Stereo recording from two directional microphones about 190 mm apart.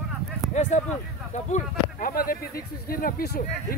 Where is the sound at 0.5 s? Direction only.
35° left (ahead or behind).